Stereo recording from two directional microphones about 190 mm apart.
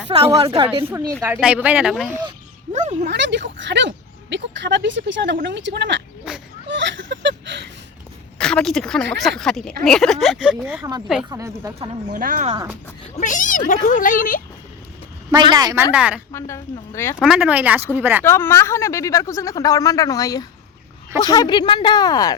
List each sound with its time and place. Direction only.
0.1 s a woman's voice: 25° right (ahead or behind)
0.9 s speech: 15° right (ahead or behind)
2.7 s speech: 40° right (ahead or behind)
3.1 s speech: 65° right (ahead or behind)
6.3 s speech: 5° right (ahead or behind)
6.7 s a sound: 70° right (ahead or behind)
8.4 s a woman's voice: 5° left (ahead or behind); by 11.9 s 15° right (ahead or behind)
12.1 s speech: 45° right (ahead or behind)
13.1 s speech: 40° left (ahead or behind)
15.3 s speech: 25° right (ahead or behind); by 16.2 s 5° right (ahead or behind)
16.3 s speech: 15° left (ahead or behind)
17.2 s speech: 5° right (ahead or behind)
18.2 s speech: 10° left (ahead or behind)